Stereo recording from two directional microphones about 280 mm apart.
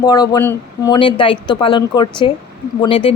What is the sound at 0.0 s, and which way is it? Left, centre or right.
Speech, centre.